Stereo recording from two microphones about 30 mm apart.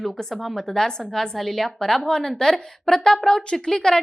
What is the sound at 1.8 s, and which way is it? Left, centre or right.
A woman's voice, centre.